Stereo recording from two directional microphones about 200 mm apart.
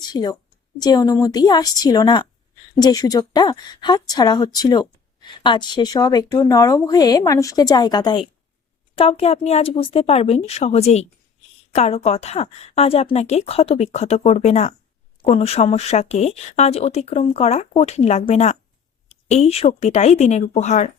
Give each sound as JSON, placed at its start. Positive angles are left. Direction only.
{"t": 0.0, "sound": "a woman's voice", "side_deg": 20}